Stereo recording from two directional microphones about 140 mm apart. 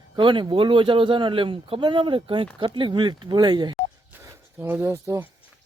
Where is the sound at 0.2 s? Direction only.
35° right (ahead or behind).